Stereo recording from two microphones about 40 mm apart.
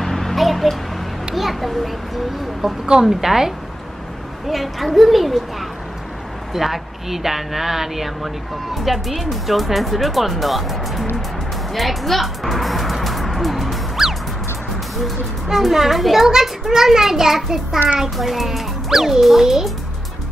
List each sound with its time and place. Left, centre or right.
0.0 s a sound: centre
1.3 s a child's voice: centre
13.0 s music: centre
15.0 s speech: centre